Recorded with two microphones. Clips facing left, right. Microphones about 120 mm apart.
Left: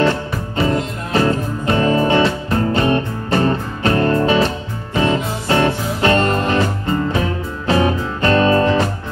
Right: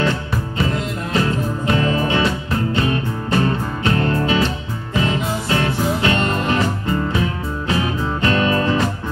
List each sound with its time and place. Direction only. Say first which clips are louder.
0.0 s music: left 3 dB; 35° left (ahead or behind)